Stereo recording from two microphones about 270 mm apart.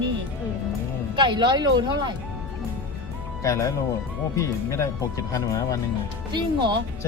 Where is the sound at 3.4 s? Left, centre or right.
Centre.